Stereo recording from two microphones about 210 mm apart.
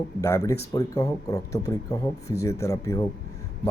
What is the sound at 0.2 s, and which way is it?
A man's voice, 15° left (ahead or behind).